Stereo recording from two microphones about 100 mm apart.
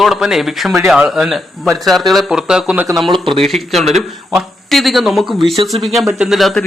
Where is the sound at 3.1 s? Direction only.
60° right (ahead or behind).